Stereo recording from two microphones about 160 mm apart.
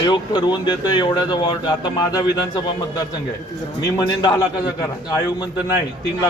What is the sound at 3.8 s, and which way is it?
Speech, 25° left (ahead or behind).